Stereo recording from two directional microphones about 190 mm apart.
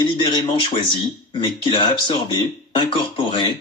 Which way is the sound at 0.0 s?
20° left (ahead or behind).